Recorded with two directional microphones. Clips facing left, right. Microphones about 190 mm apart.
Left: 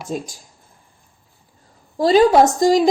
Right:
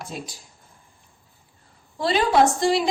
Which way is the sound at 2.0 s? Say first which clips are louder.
Left 7 dB; 40° left (ahead or behind).